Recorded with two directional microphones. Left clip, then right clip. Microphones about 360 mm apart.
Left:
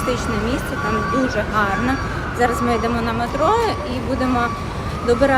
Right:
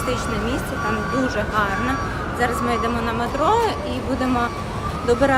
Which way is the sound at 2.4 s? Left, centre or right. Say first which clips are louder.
Left 3 dB; centre.